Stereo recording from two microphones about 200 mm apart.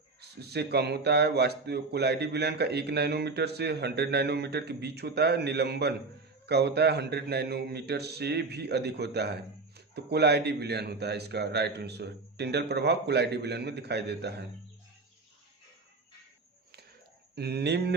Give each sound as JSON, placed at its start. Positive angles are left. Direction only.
{"t": 0.2, "sound": "a man's voice", "side_deg": -55}
{"t": 17.3, "sound": "a man's voice", "side_deg": -55}